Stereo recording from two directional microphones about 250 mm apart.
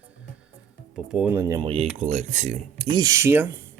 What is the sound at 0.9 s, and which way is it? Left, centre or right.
Speech, centre.